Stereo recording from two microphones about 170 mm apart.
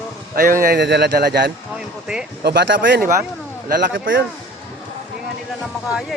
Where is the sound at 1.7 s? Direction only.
5° right (ahead or behind).